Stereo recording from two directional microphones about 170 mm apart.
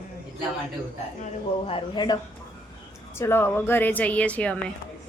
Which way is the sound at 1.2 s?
35° left (ahead or behind).